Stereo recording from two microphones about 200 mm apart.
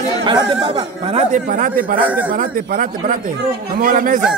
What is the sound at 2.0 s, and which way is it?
Speech, 10° right (ahead or behind).